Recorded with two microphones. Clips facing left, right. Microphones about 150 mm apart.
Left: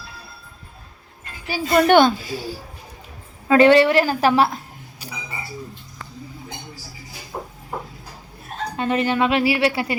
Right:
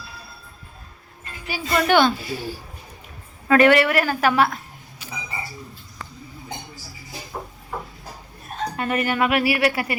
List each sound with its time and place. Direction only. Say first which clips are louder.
1.5 s speech: left 5 dB; 45° left (ahead or behind)
3.5 s a woman's voice: left 3 dB; 25° left (ahead or behind)
7.3 s a sound: left 2 dB; 20° left (ahead or behind)
8.7 s a woman's voice: left 4 dB; 25° left (ahead or behind)